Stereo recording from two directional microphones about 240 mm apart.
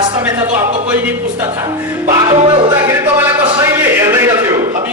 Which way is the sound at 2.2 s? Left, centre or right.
Centre.